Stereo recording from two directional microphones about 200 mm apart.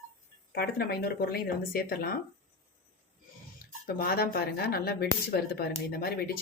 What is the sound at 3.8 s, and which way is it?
Speech, 50° left (ahead or behind).